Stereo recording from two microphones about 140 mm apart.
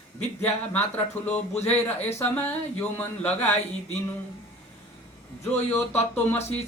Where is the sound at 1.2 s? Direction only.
10° left (ahead or behind).